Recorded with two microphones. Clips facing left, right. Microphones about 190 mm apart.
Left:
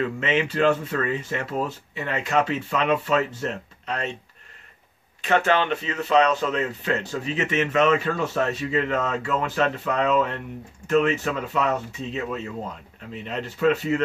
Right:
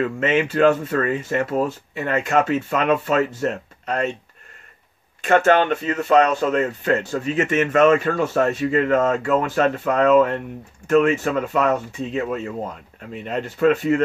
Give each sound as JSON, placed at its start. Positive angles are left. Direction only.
{"t": 0.2, "sound": "speech", "side_deg": -50}
{"t": 5.2, "sound": "speech", "side_deg": -50}